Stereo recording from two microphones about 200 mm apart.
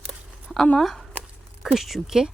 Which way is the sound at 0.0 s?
Centre (ahead or behind).